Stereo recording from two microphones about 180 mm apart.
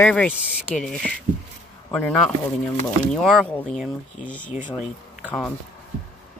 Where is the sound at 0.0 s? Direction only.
5° left (ahead or behind).